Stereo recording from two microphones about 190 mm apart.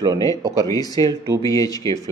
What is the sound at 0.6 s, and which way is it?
Speech, 20° left (ahead or behind).